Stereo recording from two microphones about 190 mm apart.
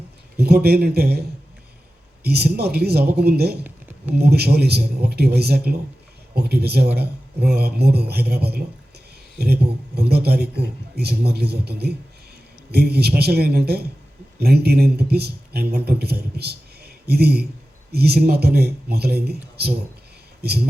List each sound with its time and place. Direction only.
0.3 s speech: 55° right (ahead or behind)
2.2 s speech: 55° right (ahead or behind)